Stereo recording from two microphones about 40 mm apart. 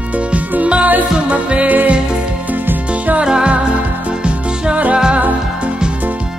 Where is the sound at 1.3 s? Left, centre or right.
Right.